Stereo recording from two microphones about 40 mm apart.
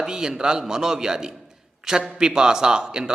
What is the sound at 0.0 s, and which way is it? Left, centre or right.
A man's voice, centre.